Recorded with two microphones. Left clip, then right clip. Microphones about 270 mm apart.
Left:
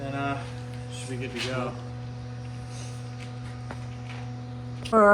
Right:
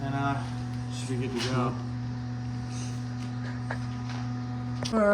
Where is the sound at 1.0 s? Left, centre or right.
Centre.